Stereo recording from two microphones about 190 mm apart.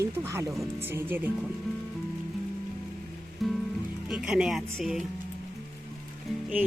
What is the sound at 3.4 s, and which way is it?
Music, centre (ahead or behind).